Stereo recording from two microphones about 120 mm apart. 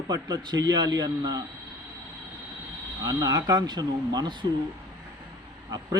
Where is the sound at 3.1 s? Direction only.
30° right (ahead or behind).